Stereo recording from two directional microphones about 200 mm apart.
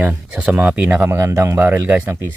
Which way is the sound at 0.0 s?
5° right (ahead or behind).